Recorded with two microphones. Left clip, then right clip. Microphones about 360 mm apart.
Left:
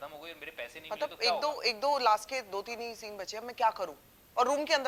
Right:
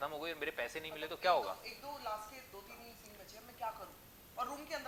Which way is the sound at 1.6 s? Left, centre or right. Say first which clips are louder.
Left 18 dB; left.